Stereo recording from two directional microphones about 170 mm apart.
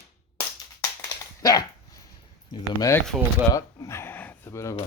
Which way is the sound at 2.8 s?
20° left (ahead or behind).